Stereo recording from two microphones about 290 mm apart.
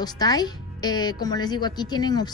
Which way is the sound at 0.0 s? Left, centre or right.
Centre.